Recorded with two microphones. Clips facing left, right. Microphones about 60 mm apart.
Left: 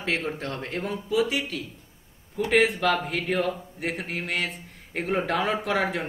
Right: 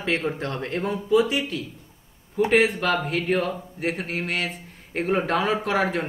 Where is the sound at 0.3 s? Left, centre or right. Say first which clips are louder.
Right 3 dB; centre.